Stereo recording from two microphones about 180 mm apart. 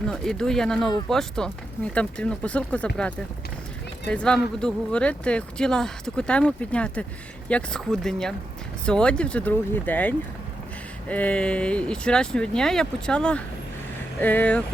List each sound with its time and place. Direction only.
0.1 s speech: 5° left (ahead or behind)